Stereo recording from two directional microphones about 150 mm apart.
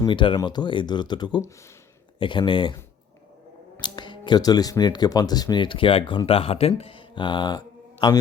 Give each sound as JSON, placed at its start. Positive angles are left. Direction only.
{"t": 0.0, "sound": "speech", "side_deg": 35}
{"t": 3.8, "sound": "speech", "side_deg": 30}